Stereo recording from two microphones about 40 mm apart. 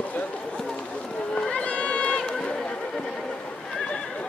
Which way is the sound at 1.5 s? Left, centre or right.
Left.